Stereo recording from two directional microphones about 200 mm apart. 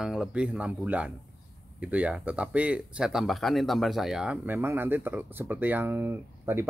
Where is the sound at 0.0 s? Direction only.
Centre (ahead or behind).